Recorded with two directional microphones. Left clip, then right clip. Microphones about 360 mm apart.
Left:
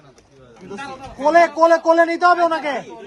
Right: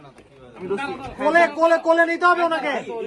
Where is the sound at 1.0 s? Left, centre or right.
Left.